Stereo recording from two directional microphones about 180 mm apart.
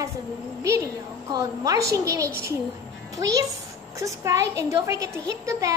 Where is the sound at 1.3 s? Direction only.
20° right (ahead or behind).